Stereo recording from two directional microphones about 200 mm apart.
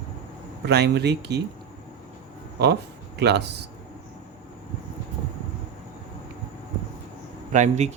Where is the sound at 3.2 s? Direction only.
55° right (ahead or behind).